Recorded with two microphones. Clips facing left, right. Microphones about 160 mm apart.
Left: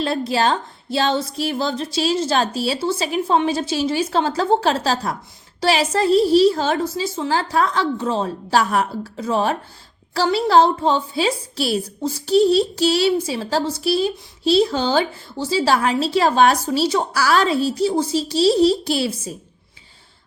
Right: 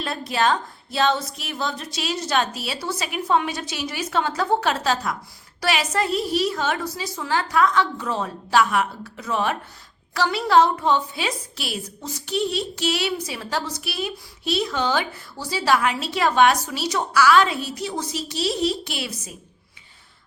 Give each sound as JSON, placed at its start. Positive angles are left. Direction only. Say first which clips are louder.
{"t": 0.0, "sound": "a woman's voice", "louder": "left 4 dB", "side_deg": 30}